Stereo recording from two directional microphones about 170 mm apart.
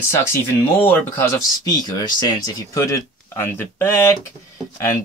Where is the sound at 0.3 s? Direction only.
10° left (ahead or behind).